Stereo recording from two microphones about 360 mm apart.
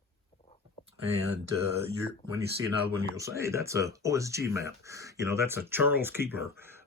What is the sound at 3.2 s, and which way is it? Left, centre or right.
Speech, centre.